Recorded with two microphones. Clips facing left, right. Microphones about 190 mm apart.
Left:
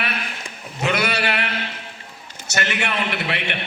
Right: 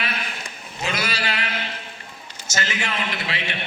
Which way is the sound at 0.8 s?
65° left (ahead or behind).